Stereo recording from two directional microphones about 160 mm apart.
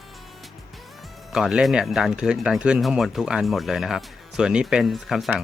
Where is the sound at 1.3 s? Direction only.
5° right (ahead or behind).